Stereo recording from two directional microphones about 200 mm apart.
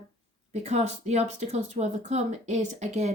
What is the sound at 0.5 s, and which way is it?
Speech, 35° right (ahead or behind).